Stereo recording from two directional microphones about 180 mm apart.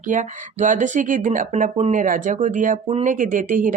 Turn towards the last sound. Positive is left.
turn(degrees=-45)  # may be behind; listen again after turning